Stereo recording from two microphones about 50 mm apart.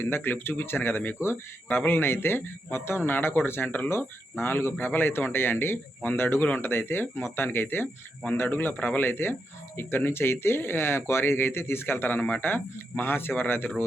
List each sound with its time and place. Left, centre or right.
0.0 s speech: left
3.0 s speech: left
8.7 s speech: left